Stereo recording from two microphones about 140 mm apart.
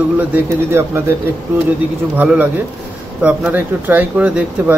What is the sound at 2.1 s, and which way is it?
Speech, 15° right (ahead or behind).